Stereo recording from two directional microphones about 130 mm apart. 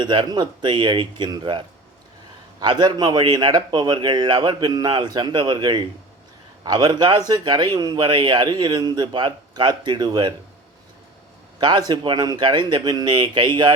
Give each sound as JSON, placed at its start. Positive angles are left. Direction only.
{"t": 0.0, "sound": "a man's voice", "side_deg": -35}
{"t": 11.6, "sound": "a man's voice", "side_deg": -35}